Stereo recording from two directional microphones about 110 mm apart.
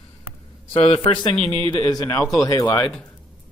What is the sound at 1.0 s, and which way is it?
Speech, 45° left (ahead or behind).